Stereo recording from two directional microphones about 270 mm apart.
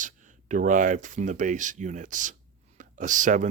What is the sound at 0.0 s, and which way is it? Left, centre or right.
Speech, right.